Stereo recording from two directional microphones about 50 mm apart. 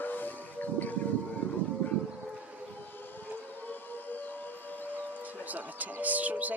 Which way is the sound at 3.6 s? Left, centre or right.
Left.